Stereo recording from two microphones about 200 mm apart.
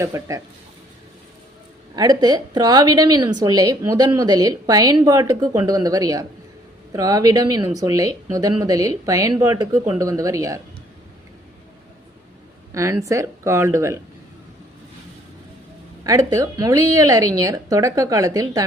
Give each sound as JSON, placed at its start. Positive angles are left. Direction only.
{"t": 0.0, "sound": "speech", "side_deg": -15}
{"t": 2.0, "sound": "a woman's voice", "side_deg": -20}
{"t": 12.7, "sound": "speech", "side_deg": -15}
{"t": 16.0, "sound": "speech", "side_deg": -15}